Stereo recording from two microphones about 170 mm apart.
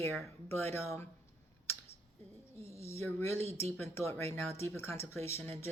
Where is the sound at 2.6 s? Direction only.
15° left (ahead or behind).